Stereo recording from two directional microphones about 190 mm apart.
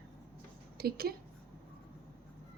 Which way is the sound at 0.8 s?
55° right (ahead or behind).